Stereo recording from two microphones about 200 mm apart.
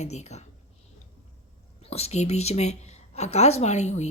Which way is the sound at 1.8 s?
30° left (ahead or behind).